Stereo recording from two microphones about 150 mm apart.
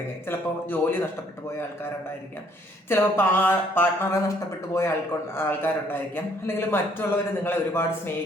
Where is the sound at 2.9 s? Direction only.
15° left (ahead or behind).